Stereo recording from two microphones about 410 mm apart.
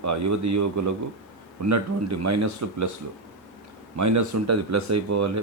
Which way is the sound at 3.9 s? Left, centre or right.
Right.